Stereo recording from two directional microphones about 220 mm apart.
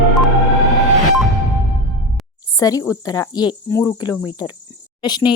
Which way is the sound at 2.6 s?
15° left (ahead or behind).